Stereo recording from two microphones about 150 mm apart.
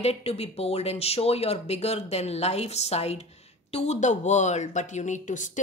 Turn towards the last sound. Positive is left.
turn(degrees=55)  # may be behind; listen again after turning